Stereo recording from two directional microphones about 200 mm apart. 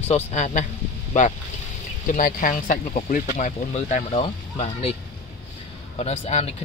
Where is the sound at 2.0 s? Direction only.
40° left (ahead or behind).